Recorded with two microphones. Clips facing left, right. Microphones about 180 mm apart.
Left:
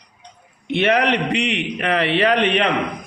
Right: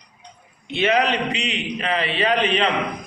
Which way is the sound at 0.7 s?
60° left (ahead or behind).